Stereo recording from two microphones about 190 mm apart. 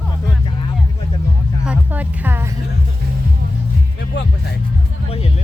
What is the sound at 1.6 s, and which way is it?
Music, 5° right (ahead or behind).